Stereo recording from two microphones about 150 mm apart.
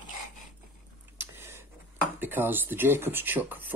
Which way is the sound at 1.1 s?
15° right (ahead or behind).